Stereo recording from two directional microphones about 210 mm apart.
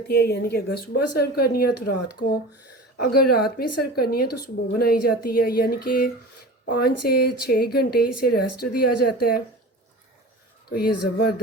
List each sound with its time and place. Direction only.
0.1 s a woman's voice: 50° left (ahead or behind)
3.0 s a woman's voice: 45° left (ahead or behind)
10.7 s a woman's voice: 45° left (ahead or behind)